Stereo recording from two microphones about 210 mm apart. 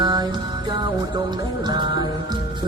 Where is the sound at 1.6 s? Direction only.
20° right (ahead or behind).